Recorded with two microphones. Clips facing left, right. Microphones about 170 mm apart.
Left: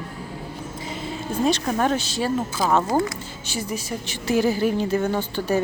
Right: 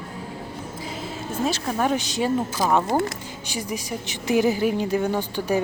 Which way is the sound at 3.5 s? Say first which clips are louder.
Left 1 dB; 15° right (ahead or behind).